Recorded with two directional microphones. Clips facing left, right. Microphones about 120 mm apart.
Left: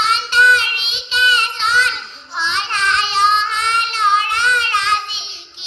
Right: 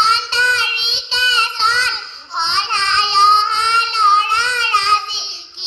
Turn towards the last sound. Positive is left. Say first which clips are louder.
# right 2 dB
turn(degrees=-30)  # may be behind; listen again after turning